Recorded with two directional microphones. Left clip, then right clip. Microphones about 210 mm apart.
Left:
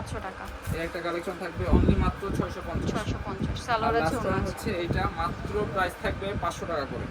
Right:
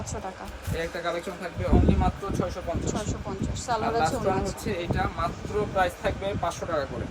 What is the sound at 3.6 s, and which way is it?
Speech, 15° right (ahead or behind).